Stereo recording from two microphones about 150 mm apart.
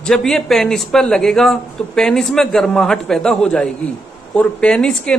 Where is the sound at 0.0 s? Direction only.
Centre (ahead or behind).